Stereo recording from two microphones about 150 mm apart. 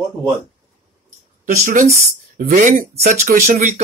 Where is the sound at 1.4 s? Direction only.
60° right (ahead or behind).